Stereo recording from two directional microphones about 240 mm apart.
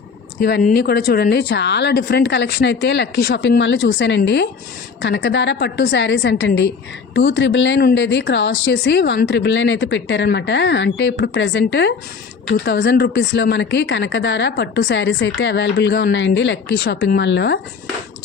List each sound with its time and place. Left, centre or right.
0.4 s speech: left